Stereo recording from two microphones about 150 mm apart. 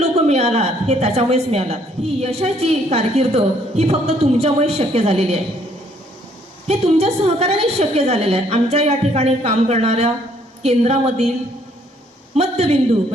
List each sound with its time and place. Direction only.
0.0 s a woman's voice: 45° right (ahead or behind)
6.7 s a woman's voice: 45° right (ahead or behind)
12.4 s a woman's voice: 45° right (ahead or behind)